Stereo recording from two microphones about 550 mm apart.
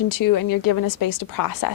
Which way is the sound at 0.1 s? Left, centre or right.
Left.